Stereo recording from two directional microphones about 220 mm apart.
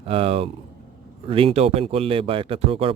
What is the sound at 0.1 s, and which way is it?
Speech, 25° right (ahead or behind).